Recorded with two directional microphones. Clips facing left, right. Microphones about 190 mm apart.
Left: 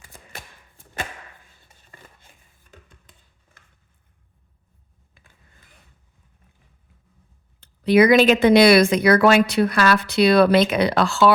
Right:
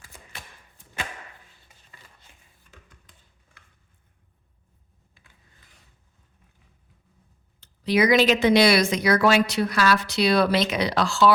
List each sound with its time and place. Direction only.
1.6 s chopping: 50° left (ahead or behind)
5.2 s a sound: 60° left (ahead or behind)
7.6 s speech: 55° left (ahead or behind)